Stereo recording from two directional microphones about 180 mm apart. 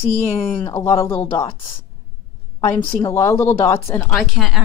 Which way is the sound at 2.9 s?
15° left (ahead or behind).